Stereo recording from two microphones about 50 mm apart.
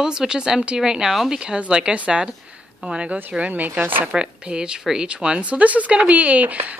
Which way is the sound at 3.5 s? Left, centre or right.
Right.